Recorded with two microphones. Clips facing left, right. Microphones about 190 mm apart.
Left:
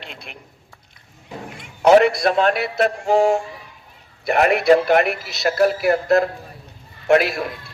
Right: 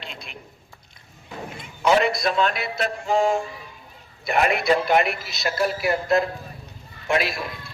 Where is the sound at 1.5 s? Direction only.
70° left (ahead or behind).